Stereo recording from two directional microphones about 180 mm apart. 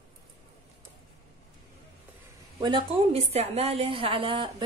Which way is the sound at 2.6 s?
30° right (ahead or behind).